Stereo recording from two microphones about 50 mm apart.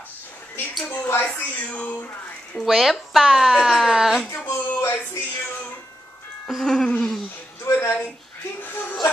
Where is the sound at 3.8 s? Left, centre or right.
Centre.